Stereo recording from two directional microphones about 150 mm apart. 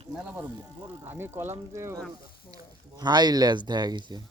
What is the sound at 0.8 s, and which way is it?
Speech, 15° right (ahead or behind).